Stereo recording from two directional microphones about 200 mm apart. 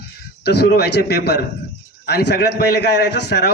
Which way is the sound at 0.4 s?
55° left (ahead or behind).